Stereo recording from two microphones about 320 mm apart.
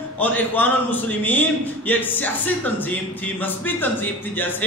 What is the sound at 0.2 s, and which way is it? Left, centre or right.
Speech, centre.